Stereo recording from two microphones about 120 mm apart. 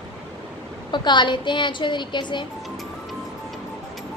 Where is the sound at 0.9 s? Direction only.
40° left (ahead or behind).